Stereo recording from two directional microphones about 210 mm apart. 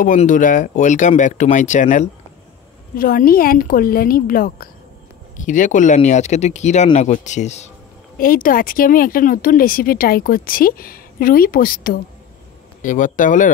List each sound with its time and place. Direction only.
0.0 s speech: 40° left (ahead or behind)